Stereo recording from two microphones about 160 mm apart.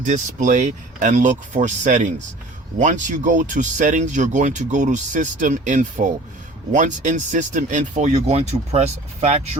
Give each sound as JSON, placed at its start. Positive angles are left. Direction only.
{"t": 0.0, "sound": "speech", "side_deg": -50}